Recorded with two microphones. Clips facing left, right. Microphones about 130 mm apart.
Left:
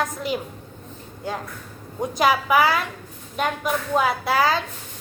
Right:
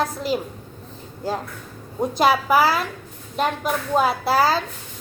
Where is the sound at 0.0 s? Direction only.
35° right (ahead or behind).